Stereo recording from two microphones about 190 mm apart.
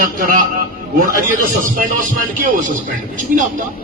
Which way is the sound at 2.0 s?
45° right (ahead or behind).